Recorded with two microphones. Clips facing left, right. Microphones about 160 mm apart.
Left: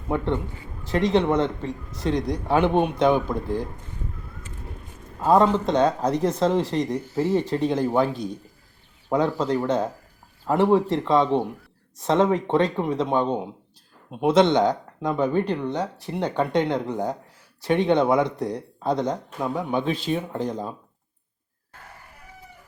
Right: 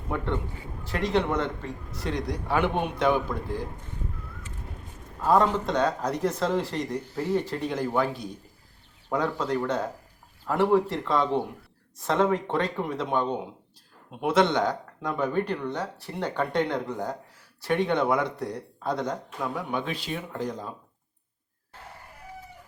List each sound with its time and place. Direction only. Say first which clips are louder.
0.1 s speech: left 5 dB; 20° left (ahead or behind)
5.2 s speech: left 4 dB; 20° left (ahead or behind)